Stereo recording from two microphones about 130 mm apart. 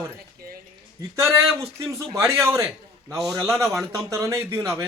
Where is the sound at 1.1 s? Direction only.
20° right (ahead or behind).